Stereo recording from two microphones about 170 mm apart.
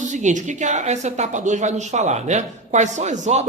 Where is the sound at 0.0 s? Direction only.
45° right (ahead or behind).